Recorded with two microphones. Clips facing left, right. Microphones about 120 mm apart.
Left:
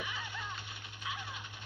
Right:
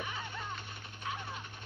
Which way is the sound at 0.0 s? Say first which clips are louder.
Right 1 dB; 40° right (ahead or behind).